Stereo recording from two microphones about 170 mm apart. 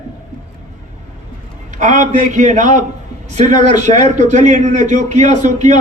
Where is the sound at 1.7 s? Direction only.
45° right (ahead or behind).